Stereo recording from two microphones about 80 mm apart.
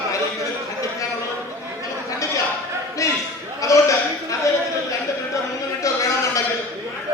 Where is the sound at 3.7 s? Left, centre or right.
Left.